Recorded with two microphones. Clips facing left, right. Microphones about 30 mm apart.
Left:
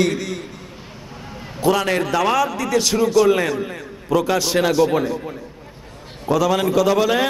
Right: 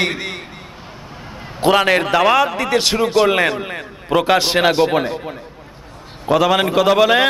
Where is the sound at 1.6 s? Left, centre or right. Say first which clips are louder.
Right 4 dB; right.